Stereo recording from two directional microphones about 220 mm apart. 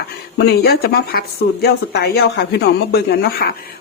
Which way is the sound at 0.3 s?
45° left (ahead or behind).